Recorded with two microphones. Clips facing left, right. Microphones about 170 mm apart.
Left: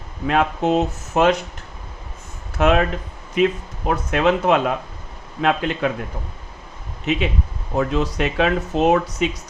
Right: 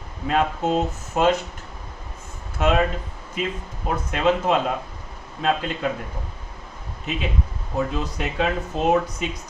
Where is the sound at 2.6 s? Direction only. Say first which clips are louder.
Left 3 dB; 75° left (ahead or behind).